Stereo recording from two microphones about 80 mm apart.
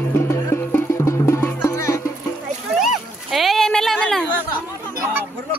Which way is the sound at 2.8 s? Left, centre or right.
Centre.